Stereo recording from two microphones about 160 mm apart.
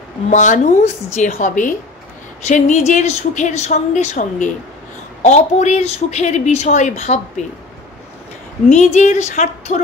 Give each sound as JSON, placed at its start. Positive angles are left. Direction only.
{"t": 0.3, "sound": "a woman's voice", "side_deg": 50}
{"t": 8.6, "sound": "a woman's voice", "side_deg": 45}